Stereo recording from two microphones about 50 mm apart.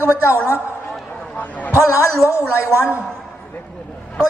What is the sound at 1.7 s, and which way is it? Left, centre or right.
A woman's voice, left.